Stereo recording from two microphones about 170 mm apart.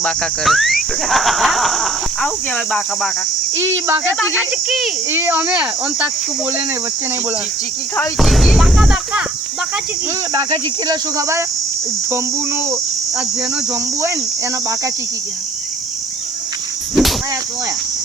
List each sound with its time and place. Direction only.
0.0 s speech: 5° left (ahead or behind)
3.5 s speech: 15° right (ahead or behind)
4.2 s speech: 5° right (ahead or behind)
8.2 s speech: centre (ahead or behind)
10.3 s cricket: 20° right (ahead or behind)
16.9 s cricket: centre (ahead or behind)